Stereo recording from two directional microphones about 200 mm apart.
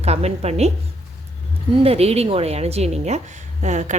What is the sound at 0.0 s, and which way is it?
Speech, 30° right (ahead or behind).